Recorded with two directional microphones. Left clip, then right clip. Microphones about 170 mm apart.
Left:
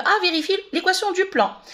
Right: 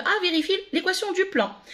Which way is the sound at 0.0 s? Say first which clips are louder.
Left 4 dB; 10° right (ahead or behind).